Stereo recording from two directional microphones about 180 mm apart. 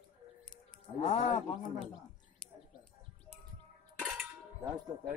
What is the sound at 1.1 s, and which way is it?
Speech, 25° left (ahead or behind).